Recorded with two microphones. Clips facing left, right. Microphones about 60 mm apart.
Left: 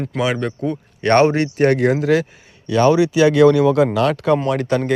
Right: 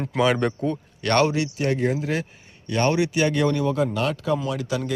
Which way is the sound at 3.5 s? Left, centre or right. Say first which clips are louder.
Left 8 dB; left.